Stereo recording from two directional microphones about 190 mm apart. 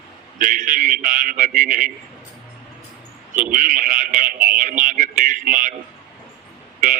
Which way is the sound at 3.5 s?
45° right (ahead or behind).